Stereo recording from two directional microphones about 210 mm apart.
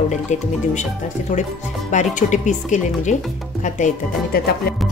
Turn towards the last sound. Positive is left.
turn(degrees=40)  # may be behind; listen again after turning